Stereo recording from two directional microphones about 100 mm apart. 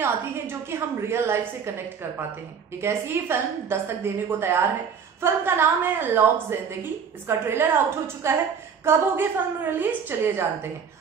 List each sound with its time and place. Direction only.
0.0 s a woman's voice: 25° right (ahead or behind)
2.8 s a woman's voice: 25° right (ahead or behind)